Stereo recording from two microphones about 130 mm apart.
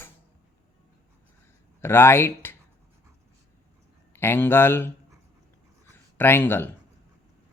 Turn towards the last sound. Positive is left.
turn(degrees=15)  # may be behind; listen again after turning